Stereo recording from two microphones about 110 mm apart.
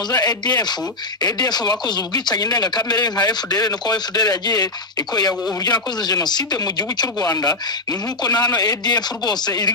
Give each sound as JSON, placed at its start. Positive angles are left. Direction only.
{"t": 0.1, "sound": "a man's voice", "side_deg": 35}